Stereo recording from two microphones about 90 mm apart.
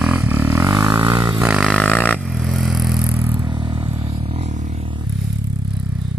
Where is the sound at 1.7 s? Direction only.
15° left (ahead or behind).